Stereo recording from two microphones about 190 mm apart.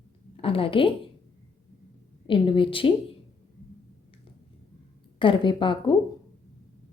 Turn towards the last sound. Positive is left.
turn(degrees=25)  # may be behind; listen again after turning